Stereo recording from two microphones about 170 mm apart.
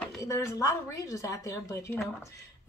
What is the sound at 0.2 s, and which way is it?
A woman's voice, 20° left (ahead or behind).